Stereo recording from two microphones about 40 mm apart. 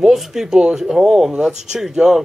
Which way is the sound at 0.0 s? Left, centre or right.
Centre.